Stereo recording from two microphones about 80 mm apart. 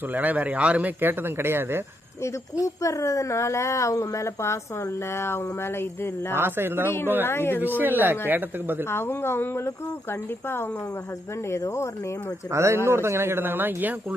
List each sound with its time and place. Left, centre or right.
0.1 s speech: right
2.6 s a woman's voice: left
6.3 s speech: right
6.8 s speech: left
7.8 s speech: right
8.9 s a woman's voice: left
12.5 s speech: right